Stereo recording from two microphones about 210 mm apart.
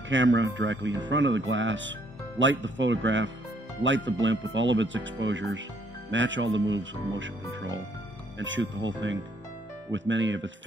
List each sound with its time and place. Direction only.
0.1 s speech: 60° right (ahead or behind)
8.4 s speech: 60° right (ahead or behind)